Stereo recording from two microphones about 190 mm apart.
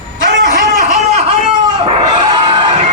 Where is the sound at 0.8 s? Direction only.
40° right (ahead or behind).